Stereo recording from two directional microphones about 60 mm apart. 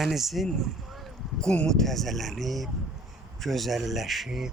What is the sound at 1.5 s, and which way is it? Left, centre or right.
Speech, centre.